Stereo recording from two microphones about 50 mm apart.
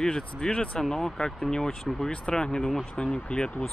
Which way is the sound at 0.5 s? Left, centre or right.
Left.